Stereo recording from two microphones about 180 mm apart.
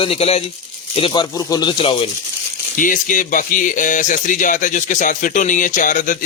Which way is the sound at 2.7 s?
45° left (ahead or behind).